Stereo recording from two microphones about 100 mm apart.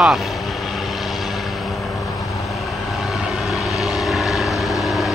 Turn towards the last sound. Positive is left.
turn(degrees=0)  # may be behind; listen again after turning